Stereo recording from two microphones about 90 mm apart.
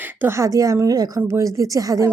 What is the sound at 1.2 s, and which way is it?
Speech, 35° right (ahead or behind).